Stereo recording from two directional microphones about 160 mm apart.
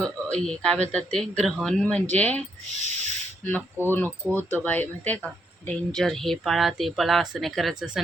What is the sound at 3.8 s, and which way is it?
Speech, 15° right (ahead or behind).